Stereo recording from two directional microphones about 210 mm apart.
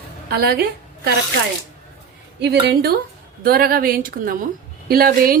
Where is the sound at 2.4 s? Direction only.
55° right (ahead or behind).